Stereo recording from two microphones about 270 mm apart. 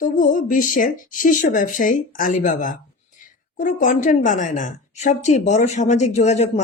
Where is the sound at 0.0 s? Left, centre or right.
Left.